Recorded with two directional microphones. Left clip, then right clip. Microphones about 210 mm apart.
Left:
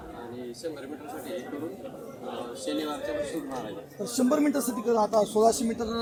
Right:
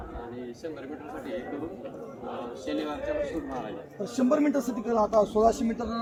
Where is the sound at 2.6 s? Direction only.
Centre (ahead or behind).